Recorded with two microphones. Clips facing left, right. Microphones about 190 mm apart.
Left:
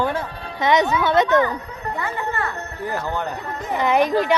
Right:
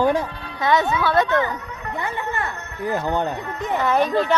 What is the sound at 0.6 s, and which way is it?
Speech, 20° left (ahead or behind).